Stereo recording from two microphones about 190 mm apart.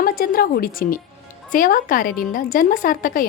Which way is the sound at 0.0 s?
50° left (ahead or behind).